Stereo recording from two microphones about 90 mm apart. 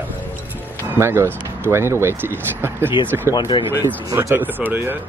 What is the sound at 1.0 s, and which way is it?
Speech, 30° right (ahead or behind).